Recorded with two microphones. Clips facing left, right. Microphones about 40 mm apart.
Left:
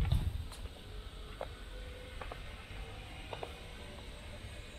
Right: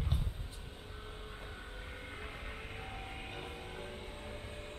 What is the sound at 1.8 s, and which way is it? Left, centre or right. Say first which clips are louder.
Vehicle: right 2 dB; right.